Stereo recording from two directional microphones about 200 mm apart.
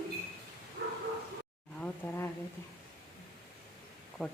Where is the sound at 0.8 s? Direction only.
70° right (ahead or behind).